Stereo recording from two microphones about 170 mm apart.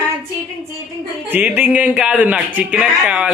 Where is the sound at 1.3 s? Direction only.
10° right (ahead or behind).